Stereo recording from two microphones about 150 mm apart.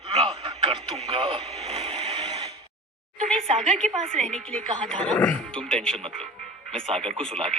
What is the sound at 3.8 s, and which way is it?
Speech, 50° right (ahead or behind).